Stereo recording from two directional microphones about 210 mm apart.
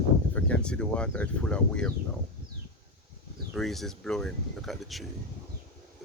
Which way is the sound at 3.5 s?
Centre (ahead or behind).